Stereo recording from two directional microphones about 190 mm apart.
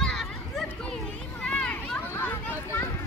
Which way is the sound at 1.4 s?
5° left (ahead or behind).